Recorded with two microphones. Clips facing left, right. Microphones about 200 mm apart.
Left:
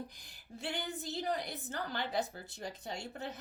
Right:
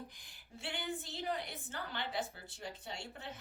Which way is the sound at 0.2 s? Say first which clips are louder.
Left 6 dB; 40° left (ahead or behind).